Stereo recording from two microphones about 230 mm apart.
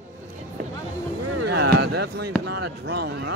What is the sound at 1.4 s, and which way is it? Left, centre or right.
Speech, right.